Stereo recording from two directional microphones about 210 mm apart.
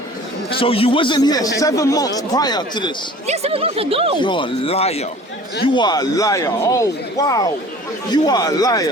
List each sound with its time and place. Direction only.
0.6 s speech: 25° left (ahead or behind)
3.2 s speech: 30° right (ahead or behind)
4.2 s speech: 25° left (ahead or behind)